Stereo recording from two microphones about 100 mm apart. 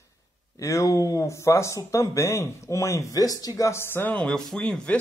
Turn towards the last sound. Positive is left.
turn(degrees=10)  # may be behind; listen again after turning